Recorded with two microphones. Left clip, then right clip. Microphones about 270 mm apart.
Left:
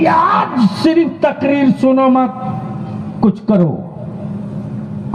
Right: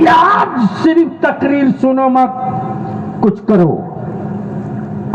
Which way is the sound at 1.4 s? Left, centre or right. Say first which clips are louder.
Right 1 dB; left.